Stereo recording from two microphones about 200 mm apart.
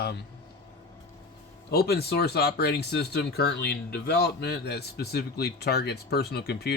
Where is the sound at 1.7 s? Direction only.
55° left (ahead or behind).